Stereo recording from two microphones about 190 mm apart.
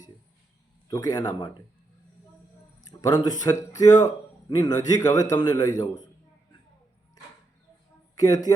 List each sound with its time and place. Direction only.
0.9 s a man's voice: 20° left (ahead or behind)
3.0 s a man's voice: 20° left (ahead or behind)
8.1 s speech: 20° left (ahead or behind)